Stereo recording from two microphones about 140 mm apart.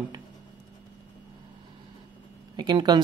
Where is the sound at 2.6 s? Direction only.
30° right (ahead or behind).